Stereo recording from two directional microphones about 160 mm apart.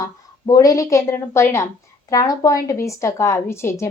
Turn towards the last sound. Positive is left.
turn(degrees=15)  # may be behind; listen again after turning